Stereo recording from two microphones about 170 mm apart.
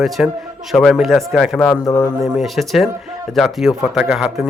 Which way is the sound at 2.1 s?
5° right (ahead or behind).